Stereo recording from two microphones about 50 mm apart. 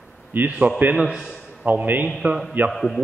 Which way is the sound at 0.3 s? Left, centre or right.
Right.